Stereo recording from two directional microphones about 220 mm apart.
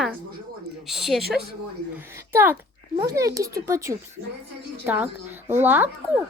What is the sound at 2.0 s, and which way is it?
A woman's voice, 10° right (ahead or behind).